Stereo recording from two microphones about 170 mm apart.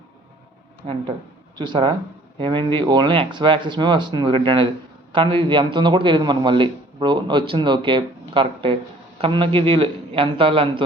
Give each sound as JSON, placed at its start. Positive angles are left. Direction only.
{"t": 0.8, "sound": "a man's voice", "side_deg": -35}